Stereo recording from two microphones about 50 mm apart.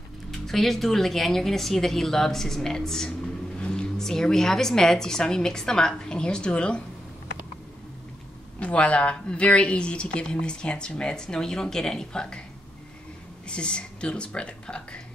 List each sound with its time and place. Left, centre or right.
0.3 s speech: centre; by 6.8 s left
8.5 s speech: left
13.5 s speech: left